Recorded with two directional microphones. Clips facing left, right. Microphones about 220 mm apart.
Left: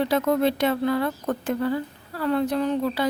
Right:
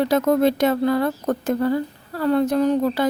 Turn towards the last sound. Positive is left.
turn(degrees=-45)  # may be behind; listen again after turning